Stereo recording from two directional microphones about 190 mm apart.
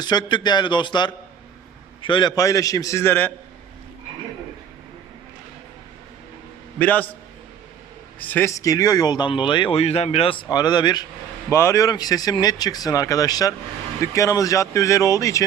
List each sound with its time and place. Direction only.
0.0 s speech: 20° left (ahead or behind)
6.7 s speech: 10° left (ahead or behind)
8.2 s speech: 10° left (ahead or behind)